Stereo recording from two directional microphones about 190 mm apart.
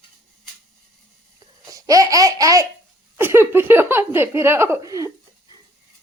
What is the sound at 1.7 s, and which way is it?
Laughter, 15° right (ahead or behind).